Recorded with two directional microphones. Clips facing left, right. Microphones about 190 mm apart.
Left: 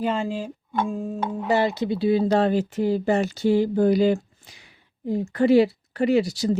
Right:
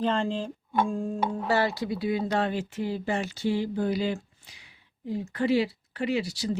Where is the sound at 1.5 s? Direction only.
15° left (ahead or behind).